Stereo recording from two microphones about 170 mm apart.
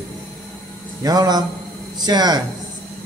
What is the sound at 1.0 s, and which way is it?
Speech, 25° right (ahead or behind).